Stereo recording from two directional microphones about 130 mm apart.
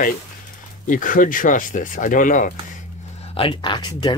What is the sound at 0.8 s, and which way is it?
Speech, 90° left.